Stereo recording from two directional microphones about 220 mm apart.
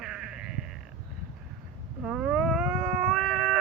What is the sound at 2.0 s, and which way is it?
Cat, 5° right (ahead or behind).